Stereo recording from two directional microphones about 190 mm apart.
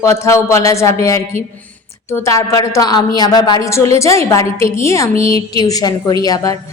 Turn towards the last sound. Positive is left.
turn(degrees=20)  # may be behind; listen again after turning